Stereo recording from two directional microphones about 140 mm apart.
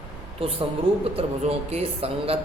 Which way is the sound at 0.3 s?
45° right (ahead or behind).